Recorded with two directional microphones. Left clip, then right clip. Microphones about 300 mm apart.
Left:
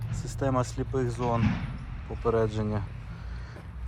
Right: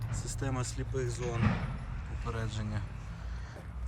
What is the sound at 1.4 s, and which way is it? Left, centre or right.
Speech, right.